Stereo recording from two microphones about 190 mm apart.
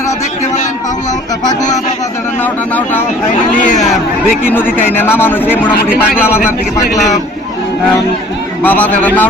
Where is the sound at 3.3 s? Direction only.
40° left (ahead or behind).